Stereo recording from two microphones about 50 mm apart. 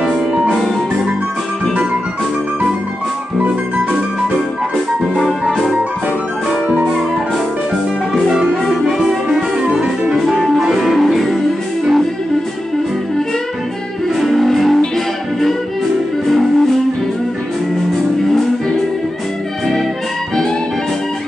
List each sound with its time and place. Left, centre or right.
0.0 s music: centre
3.3 s music: right
5.1 s music: centre
8.1 s music: centre
9.6 s music: right
10.4 s music: centre
14.2 s music: centre
16.3 s music: centre